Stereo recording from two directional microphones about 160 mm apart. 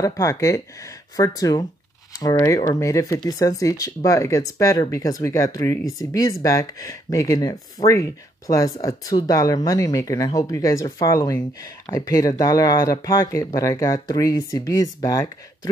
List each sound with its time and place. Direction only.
0.0 s speech: 20° left (ahead or behind)